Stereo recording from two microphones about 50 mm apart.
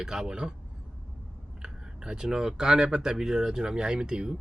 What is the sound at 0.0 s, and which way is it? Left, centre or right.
Speech, centre.